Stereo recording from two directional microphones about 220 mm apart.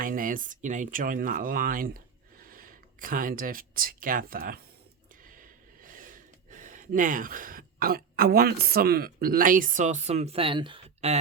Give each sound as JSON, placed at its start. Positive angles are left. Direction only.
{"t": 0.0, "sound": "speech", "side_deg": -40}